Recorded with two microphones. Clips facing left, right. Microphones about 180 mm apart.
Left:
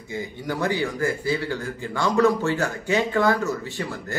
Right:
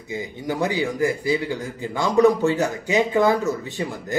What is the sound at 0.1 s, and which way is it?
A man's voice, 15° right (ahead or behind).